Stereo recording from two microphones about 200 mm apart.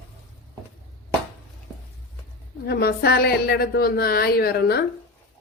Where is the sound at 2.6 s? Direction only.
55° left (ahead or behind).